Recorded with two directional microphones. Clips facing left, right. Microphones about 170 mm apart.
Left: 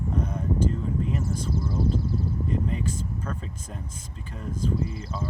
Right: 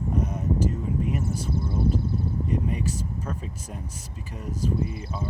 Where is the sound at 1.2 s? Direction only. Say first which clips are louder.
Even; 60° right (ahead or behind).